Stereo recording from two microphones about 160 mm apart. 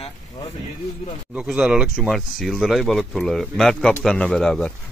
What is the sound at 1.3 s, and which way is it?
Speech, 5° right (ahead or behind).